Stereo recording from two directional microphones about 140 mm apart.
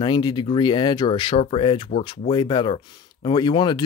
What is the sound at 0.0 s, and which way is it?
Speech, 35° left (ahead or behind).